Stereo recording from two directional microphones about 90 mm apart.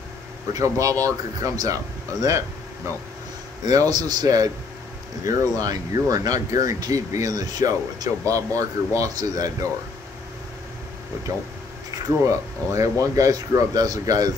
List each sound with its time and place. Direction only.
0.5 s speech: 40° right (ahead or behind)
3.7 s speech: 45° right (ahead or behind)
12.3 s speech: 35° right (ahead or behind)